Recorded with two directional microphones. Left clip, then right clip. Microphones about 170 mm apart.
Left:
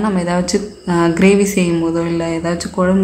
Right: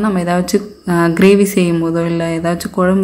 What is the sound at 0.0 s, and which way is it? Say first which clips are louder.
Speech: right 1 dB; 20° right (ahead or behind).